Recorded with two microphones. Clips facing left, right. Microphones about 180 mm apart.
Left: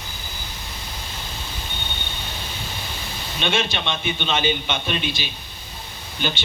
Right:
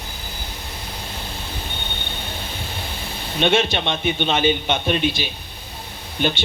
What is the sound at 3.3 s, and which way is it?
A man's voice, 55° right (ahead or behind).